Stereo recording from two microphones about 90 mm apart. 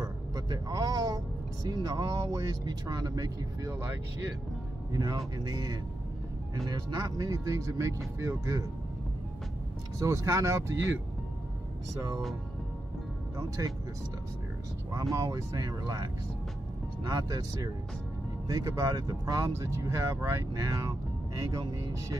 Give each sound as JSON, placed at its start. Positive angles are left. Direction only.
{"t": 0.0, "sound": "speech", "side_deg": -45}
{"t": 4.9, "sound": "speech", "side_deg": -40}
{"t": 9.9, "sound": "speech", "side_deg": -35}
{"t": 13.4, "sound": "speech", "side_deg": -40}
{"t": 14.9, "sound": "speech", "side_deg": -35}
{"t": 17.1, "sound": "speech", "side_deg": -40}